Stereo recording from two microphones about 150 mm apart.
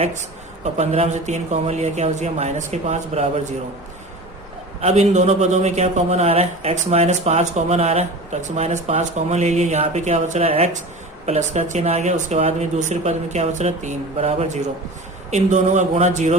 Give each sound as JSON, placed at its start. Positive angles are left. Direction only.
{"t": 0.0, "sound": "a man's voice", "side_deg": -50}
{"t": 4.8, "sound": "a man's voice", "side_deg": -50}